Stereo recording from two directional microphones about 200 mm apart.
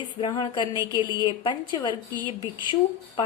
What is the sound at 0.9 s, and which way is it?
A woman's voice, 20° left (ahead or behind).